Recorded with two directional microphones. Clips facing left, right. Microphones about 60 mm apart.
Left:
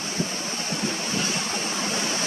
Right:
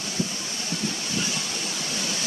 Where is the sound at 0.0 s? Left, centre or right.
Left.